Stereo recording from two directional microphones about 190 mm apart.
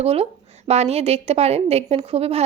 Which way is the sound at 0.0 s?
30° right (ahead or behind).